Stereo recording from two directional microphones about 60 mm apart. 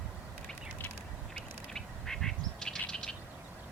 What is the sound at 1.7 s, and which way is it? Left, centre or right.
Bird, centre.